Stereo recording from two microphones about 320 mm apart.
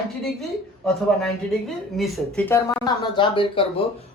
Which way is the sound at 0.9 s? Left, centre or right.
Centre.